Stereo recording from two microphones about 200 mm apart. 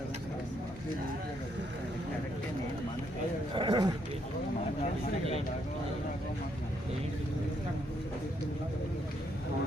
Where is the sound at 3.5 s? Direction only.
20° right (ahead or behind).